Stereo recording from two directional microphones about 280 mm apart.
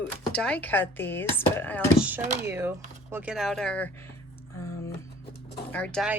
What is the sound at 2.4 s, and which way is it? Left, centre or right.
Speech, centre.